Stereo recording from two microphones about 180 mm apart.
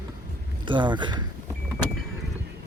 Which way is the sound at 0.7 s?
25° right (ahead or behind).